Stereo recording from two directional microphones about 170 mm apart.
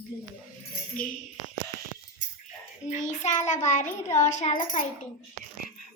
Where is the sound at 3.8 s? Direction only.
15° left (ahead or behind).